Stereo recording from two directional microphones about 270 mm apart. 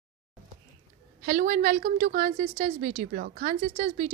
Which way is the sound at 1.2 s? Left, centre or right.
Right.